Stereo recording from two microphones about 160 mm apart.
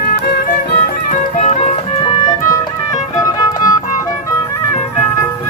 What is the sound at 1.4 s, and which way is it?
Music, 45° left (ahead or behind).